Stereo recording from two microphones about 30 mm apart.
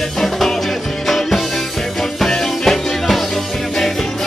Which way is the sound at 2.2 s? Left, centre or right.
Centre.